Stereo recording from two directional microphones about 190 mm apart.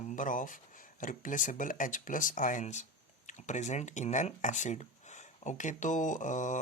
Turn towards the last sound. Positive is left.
turn(degrees=40)  # may be behind; listen again after turning